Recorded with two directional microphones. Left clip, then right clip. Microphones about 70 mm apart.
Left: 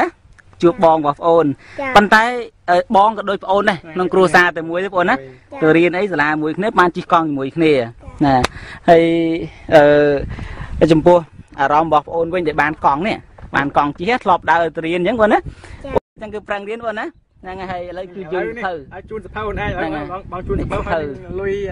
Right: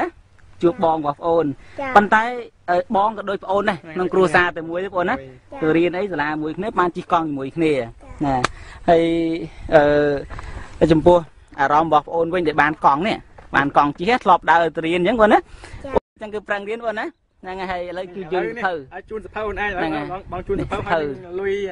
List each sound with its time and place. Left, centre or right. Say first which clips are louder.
0.6 s a man's voice: left 6 dB; left
8.8 s speech: left 5 dB; centre
11.0 s a man's voice: left 3 dB; centre
12.1 s a man's voice: left 2 dB; right
17.5 s speech: even; right
19.8 s speech: left 1 dB; right
20.2 s speech: left 1 dB; right
20.8 s speech: left 1 dB; right